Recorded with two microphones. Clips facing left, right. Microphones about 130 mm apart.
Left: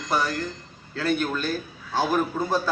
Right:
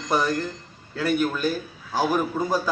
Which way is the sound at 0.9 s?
10° right (ahead or behind).